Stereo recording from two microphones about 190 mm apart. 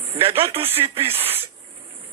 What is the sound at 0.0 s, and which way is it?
A man's voice, 30° right (ahead or behind).